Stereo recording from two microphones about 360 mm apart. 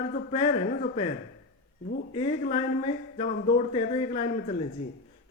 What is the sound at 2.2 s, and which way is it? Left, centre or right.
Speech, centre.